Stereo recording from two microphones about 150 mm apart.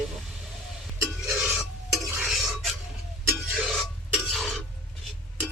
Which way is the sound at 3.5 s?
Centre (ahead or behind).